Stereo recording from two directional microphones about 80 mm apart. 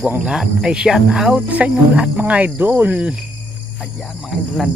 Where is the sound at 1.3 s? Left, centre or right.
Centre.